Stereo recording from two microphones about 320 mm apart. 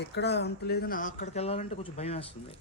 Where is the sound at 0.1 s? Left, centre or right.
Left.